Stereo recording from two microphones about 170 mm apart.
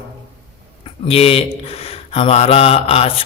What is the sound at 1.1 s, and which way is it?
Speech, 35° left (ahead or behind).